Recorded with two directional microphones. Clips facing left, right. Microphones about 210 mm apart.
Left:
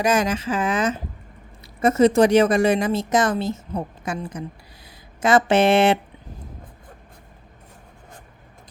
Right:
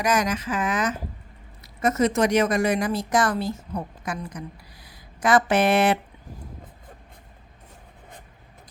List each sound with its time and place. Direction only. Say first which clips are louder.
0.0 s a woman's voice: left 3 dB; 30° left (ahead or behind)